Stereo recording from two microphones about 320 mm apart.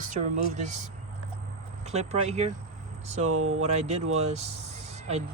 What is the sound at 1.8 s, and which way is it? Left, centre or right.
Speech, right.